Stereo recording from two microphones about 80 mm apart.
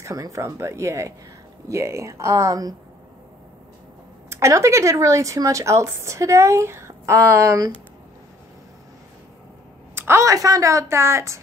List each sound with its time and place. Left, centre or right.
0.0 s speech: right
4.3 s speech: right
9.9 s a sound: right
10.2 s speech: right